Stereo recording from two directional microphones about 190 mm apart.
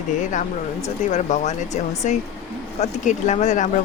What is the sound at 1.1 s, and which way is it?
Speech, 40° left (ahead or behind).